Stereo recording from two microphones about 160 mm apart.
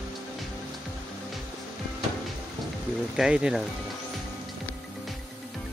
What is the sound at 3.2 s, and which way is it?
Speech, 5° right (ahead or behind).